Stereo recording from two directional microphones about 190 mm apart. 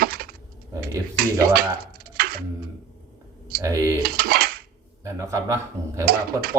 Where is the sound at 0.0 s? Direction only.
50° right (ahead or behind).